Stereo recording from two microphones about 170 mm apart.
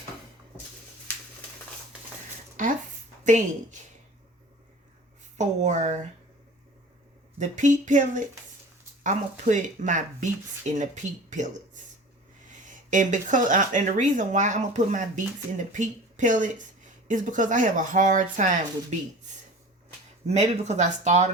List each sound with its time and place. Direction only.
3.2 s speech: 45° right (ahead or behind)
5.4 s speech: 45° right (ahead or behind)
7.3 s speech: 45° right (ahead or behind)
20.2 s speech: 40° right (ahead or behind)